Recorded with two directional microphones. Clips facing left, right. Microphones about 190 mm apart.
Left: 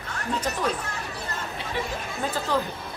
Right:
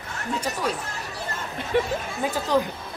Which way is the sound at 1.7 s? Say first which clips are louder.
Right 9 dB; 50° right (ahead or behind).